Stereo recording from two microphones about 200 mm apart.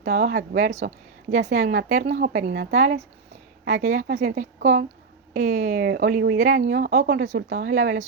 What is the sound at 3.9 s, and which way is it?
Speech, 55° right (ahead or behind).